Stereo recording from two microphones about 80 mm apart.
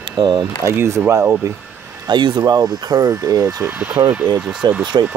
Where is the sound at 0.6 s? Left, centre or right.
Right.